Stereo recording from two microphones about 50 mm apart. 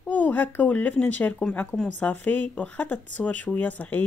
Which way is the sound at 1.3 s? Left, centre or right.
Left.